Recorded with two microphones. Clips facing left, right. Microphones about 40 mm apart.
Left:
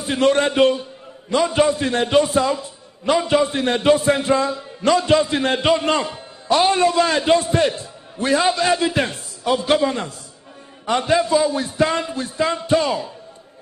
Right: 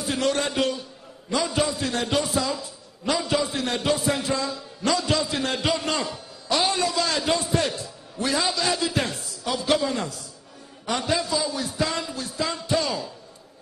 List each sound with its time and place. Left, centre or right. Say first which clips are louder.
0.0 s a man's voice: left 7 dB; left